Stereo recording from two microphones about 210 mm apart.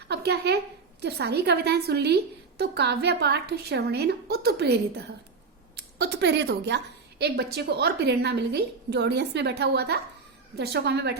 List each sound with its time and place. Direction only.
0.1 s a woman's voice: 50° right (ahead or behind)